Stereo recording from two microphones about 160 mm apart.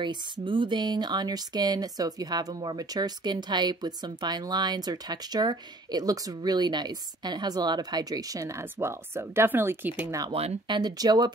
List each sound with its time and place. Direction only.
0.0 s speech: 30° right (ahead or behind); by 10.2 s 15° right (ahead or behind)
10.3 s speech: 35° right (ahead or behind)
10.8 s speech: 25° right (ahead or behind)